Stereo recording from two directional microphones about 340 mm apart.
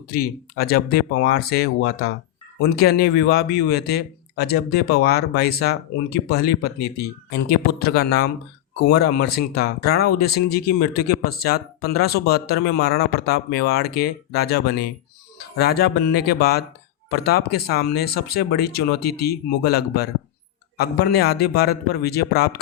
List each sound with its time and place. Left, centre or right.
0.1 s speech: left